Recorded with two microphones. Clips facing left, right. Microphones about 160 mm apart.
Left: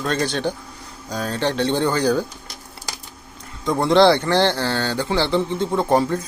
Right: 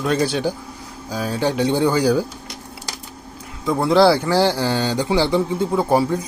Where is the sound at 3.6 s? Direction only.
5° right (ahead or behind).